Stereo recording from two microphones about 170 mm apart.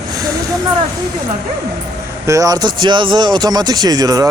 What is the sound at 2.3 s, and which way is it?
Speech, 20° right (ahead or behind).